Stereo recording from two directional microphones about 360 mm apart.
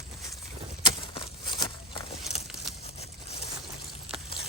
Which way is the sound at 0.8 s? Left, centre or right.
Centre.